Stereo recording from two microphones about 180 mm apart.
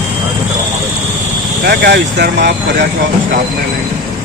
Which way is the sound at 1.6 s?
60° right (ahead or behind).